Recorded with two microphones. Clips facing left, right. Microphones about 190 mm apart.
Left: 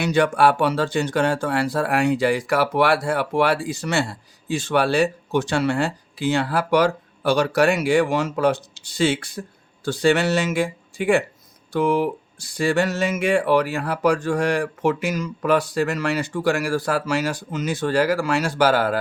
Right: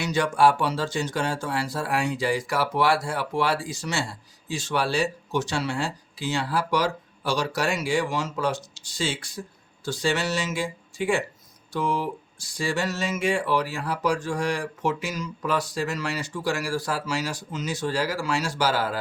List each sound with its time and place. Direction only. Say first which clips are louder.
0.0 s speech: left 3 dB; 60° left (ahead or behind)